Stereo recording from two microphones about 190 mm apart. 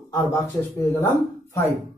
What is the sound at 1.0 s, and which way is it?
Speech, 15° left (ahead or behind).